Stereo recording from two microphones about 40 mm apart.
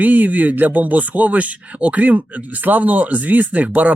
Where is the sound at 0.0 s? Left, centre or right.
Right.